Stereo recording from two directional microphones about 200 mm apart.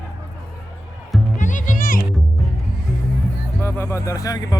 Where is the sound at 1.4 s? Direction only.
40° left (ahead or behind).